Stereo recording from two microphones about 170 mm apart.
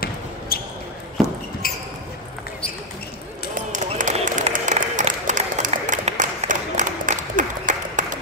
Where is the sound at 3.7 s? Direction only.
50° right (ahead or behind).